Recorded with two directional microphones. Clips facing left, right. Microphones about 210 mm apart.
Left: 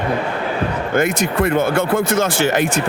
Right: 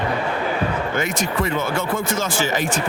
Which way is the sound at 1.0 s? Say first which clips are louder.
Left 9 dB; 55° left (ahead or behind).